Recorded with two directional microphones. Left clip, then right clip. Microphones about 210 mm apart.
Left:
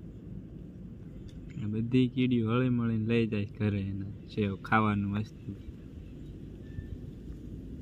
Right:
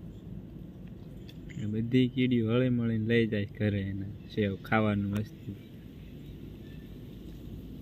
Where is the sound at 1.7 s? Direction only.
5° left (ahead or behind).